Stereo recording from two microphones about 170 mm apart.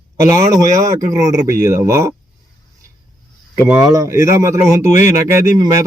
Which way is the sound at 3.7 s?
5° right (ahead or behind).